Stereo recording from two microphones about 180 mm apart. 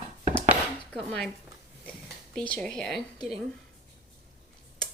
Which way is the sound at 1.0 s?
5° left (ahead or behind).